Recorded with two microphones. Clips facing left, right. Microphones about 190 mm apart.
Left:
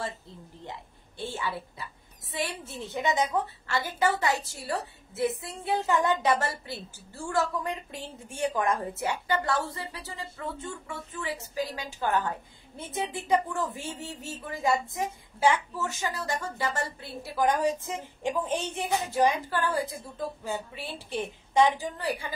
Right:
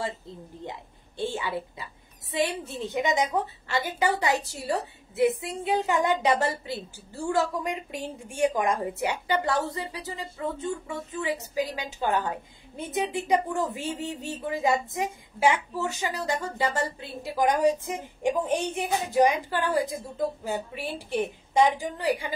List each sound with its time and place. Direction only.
0.7 s a woman's voice: 20° right (ahead or behind)